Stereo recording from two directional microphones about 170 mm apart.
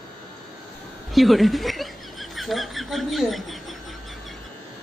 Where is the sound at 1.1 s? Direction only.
Centre (ahead or behind).